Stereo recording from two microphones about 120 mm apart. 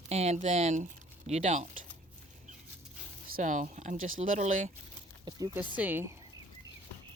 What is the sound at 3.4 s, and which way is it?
Speech, 90° right.